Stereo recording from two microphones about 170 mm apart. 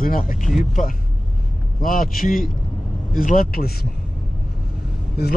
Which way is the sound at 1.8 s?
55° left (ahead or behind).